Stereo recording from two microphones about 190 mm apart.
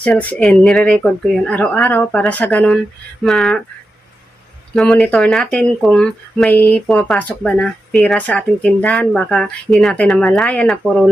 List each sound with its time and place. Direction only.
0.0 s speech: 10° left (ahead or behind)
4.7 s speech: 5° left (ahead or behind)